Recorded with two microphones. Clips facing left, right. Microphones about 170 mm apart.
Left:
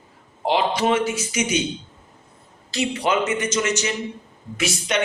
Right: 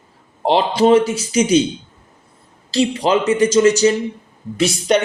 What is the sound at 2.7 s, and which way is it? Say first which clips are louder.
A man's voice: right 6 dB; 30° right (ahead or behind).